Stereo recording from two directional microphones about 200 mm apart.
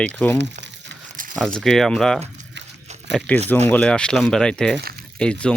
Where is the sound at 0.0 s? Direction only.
10° left (ahead or behind).